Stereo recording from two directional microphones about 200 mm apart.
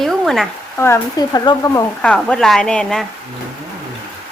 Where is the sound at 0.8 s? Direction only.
15° left (ahead or behind).